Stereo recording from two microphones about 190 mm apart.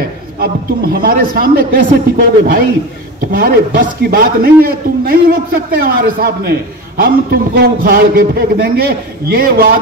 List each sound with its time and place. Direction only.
1.0 s a man's voice: 50° right (ahead or behind)